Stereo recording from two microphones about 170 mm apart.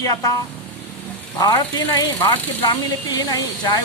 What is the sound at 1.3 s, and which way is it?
Speech, 25° left (ahead or behind).